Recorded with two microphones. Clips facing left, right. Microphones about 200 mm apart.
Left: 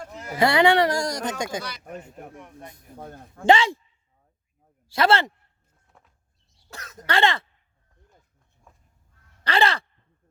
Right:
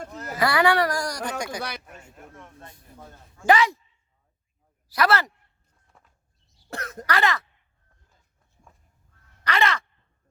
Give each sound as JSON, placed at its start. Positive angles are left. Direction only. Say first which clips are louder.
{"t": 0.3, "sound": "a woman's voice", "louder": "left 3 dB", "side_deg": 25}
{"t": 2.9, "sound": "a man's voice", "louder": "left 7 dB", "side_deg": 50}
{"t": 3.4, "sound": "a woman's voice", "louder": "left 2 dB", "side_deg": 25}
{"t": 4.9, "sound": "a woman's voice", "louder": "left 2 dB", "side_deg": 25}
{"t": 5.9, "sound": "a sound", "louder": "left 1 dB", "side_deg": 0}
{"t": 6.7, "sound": "speech", "louder": "right 9 dB", "side_deg": -60}
{"t": 7.1, "sound": "a woman's voice", "louder": "left 2 dB", "side_deg": 25}
{"t": 9.4, "sound": "caw", "louder": "left 2 dB", "side_deg": 30}